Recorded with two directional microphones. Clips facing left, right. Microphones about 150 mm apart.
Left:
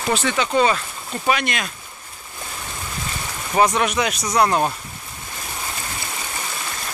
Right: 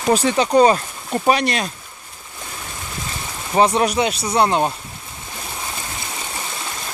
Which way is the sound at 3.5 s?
30° right (ahead or behind).